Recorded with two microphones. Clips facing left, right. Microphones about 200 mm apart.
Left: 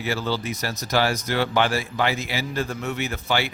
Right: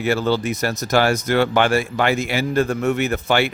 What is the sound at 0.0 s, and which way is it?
Speech, 55° right (ahead or behind).